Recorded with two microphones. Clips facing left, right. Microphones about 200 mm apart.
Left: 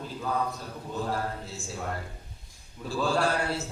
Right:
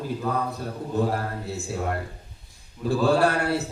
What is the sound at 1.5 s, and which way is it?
A man's voice, 60° right (ahead or behind).